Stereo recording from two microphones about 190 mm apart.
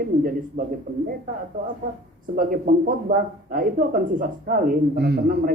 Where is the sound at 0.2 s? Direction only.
45° right (ahead or behind).